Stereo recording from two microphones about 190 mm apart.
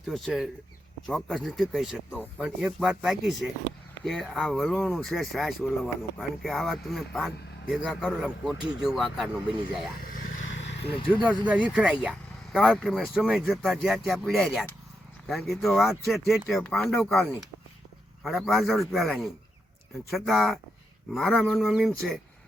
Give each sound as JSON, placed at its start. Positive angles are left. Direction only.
{"t": 0.1, "sound": "speech", "side_deg": 0}
{"t": 10.0, "sound": "vehicle", "side_deg": 45}
{"t": 10.5, "sound": "vehicle", "side_deg": 65}
{"t": 11.2, "sound": "speech", "side_deg": -10}